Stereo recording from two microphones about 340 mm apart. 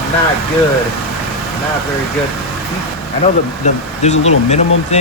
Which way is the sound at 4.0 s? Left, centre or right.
Centre.